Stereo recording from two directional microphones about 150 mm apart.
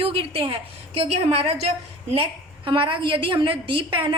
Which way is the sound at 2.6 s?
35° right (ahead or behind).